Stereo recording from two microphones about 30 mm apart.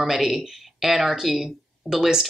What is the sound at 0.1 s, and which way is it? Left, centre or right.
Speech, centre.